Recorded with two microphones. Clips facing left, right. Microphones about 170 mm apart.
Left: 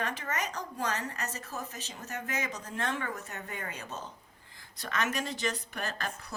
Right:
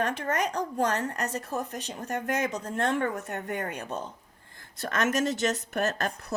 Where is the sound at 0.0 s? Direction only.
60° right (ahead or behind).